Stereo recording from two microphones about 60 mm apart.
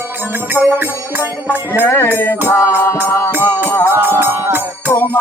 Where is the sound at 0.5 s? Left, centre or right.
Right.